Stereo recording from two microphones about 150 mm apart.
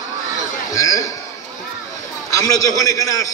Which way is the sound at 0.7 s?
25° left (ahead or behind).